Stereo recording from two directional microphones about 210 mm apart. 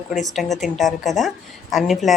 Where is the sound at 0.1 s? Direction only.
Centre (ahead or behind).